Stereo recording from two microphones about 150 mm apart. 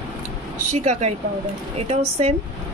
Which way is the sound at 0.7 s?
50° right (ahead or behind).